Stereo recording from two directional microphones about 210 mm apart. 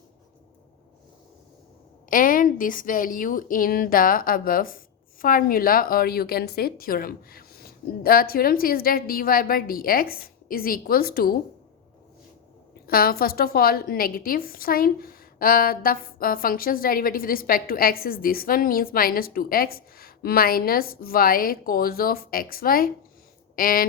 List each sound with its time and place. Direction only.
2.0 s a woman's voice: 40° left (ahead or behind)
12.9 s a woman's voice: 45° left (ahead or behind)